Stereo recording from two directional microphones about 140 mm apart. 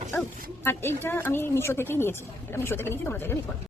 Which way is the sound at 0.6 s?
15° left (ahead or behind).